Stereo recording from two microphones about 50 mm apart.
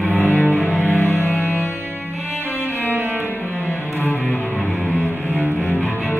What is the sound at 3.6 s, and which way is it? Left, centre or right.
Music, left.